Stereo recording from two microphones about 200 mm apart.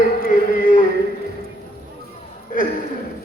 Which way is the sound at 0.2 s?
40° left (ahead or behind).